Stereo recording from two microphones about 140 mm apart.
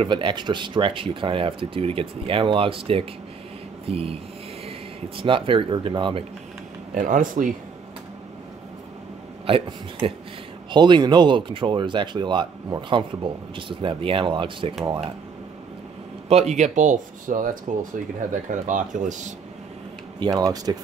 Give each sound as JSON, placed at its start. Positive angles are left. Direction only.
{"t": 0.0, "sound": "speech", "side_deg": -35}
{"t": 3.8, "sound": "a sound", "side_deg": -45}
{"t": 4.6, "sound": "speech", "side_deg": -40}
{"t": 6.9, "sound": "speech", "side_deg": -70}
{"t": 9.5, "sound": "speech", "side_deg": -40}
{"t": 16.3, "sound": "speech", "side_deg": -50}
{"t": 20.2, "sound": "speech", "side_deg": -25}